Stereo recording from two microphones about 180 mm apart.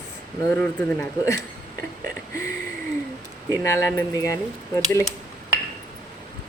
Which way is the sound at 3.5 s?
15° left (ahead or behind).